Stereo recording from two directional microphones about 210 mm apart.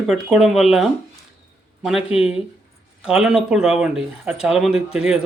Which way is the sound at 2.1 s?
30° left (ahead or behind).